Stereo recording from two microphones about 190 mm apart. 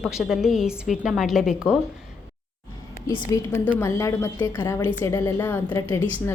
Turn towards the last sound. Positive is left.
turn(degrees=10)  # may be behind; listen again after turning